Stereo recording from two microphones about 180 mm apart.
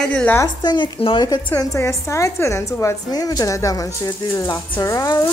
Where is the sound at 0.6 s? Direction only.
25° left (ahead or behind).